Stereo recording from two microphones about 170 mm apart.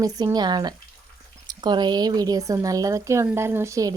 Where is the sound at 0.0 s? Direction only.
20° right (ahead or behind).